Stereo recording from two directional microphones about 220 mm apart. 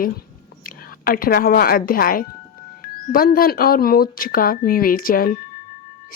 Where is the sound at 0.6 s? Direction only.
40° left (ahead or behind).